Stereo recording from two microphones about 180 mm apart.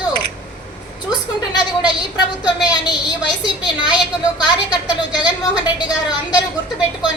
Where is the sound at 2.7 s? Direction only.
25° left (ahead or behind).